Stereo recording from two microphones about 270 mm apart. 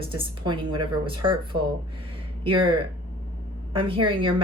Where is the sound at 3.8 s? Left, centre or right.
Centre.